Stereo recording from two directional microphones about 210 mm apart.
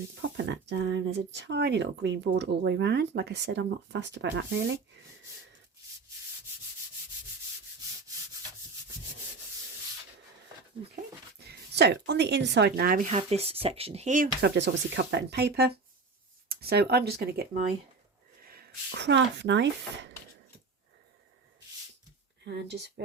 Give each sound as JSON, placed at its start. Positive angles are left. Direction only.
{"t": 0.2, "sound": "speech", "side_deg": -55}
{"t": 11.3, "sound": "speech", "side_deg": -50}
{"t": 13.1, "sound": "speech", "side_deg": -30}
{"t": 22.4, "sound": "speech", "side_deg": -55}